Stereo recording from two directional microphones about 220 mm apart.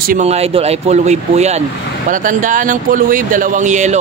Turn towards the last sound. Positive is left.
turn(degrees=-35)  # may be behind; listen again after turning